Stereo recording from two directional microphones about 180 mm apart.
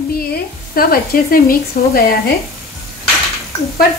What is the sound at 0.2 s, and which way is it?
Speech, 55° left (ahead or behind).